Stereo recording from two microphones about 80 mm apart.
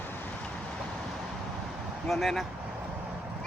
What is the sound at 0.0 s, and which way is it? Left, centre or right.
Vehicle, left.